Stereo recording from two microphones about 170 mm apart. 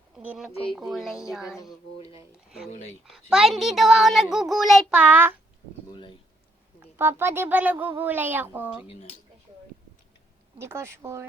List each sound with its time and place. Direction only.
0.2 s a child's voice: 5° right (ahead or behind)
3.1 s a child's voice: centre (ahead or behind)
5.9 s speech: 25° left (ahead or behind)
6.9 s speech: 15° right (ahead or behind)
8.9 s speech: 40° left (ahead or behind)
10.6 s speech: 15° right (ahead or behind)